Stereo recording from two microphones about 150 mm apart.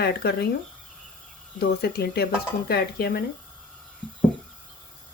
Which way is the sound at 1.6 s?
90° left.